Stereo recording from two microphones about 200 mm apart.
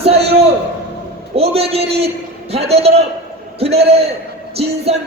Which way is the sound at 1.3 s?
30° right (ahead or behind).